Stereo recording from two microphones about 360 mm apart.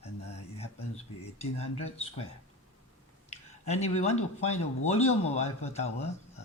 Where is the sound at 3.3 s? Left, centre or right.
Centre.